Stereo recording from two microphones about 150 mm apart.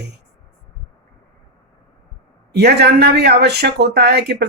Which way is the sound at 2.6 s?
90° right.